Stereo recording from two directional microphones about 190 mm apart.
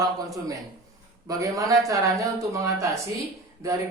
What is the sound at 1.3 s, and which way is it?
Speech, 20° right (ahead or behind).